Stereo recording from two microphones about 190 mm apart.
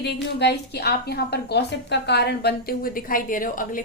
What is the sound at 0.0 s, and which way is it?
A woman's voice, 65° left (ahead or behind).